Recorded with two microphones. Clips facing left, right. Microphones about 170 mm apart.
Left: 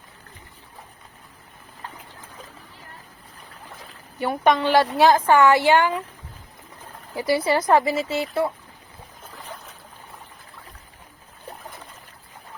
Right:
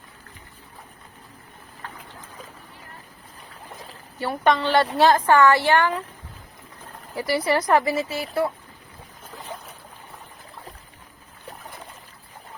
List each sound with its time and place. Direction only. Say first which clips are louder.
4.2 s a woman's voice: left 1 dB; 15° left (ahead or behind)
7.2 s speech: left 1 dB; 25° left (ahead or behind)